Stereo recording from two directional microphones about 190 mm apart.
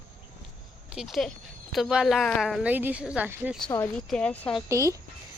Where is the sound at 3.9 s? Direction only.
5° left (ahead or behind).